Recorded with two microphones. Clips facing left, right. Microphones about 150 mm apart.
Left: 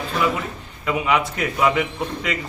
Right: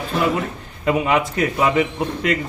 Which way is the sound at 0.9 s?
40° right (ahead or behind).